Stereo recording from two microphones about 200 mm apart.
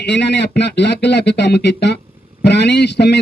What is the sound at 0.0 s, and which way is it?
Speech, 55° left (ahead or behind).